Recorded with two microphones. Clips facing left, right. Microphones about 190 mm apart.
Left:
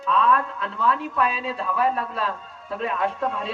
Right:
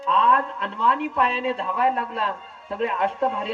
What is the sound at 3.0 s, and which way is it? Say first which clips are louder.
Speech: right 1 dB; 25° right (ahead or behind).